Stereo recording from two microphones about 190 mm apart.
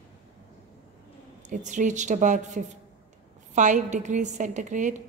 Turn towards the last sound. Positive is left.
turn(degrees=-40)  # may be behind; listen again after turning